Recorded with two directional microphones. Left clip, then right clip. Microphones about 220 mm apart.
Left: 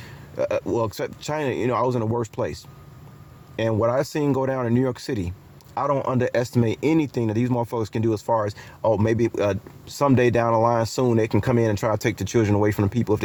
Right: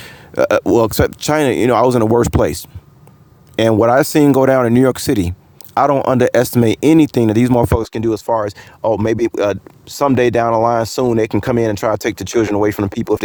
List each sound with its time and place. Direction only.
0.0 s speech: 45° right (ahead or behind)